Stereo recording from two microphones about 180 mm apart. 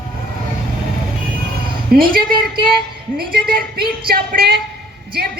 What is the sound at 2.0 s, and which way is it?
A woman's voice, 55° right (ahead or behind).